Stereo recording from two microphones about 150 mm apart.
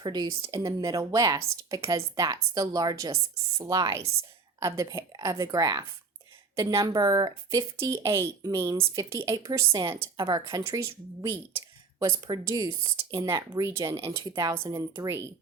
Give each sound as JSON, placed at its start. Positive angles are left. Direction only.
{"t": 0.0, "sound": "speech", "side_deg": -25}
{"t": 12.0, "sound": "speech", "side_deg": -30}
{"t": 13.0, "sound": "speech", "side_deg": -20}